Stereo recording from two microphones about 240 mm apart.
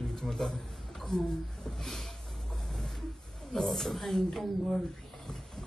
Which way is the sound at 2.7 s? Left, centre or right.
Centre.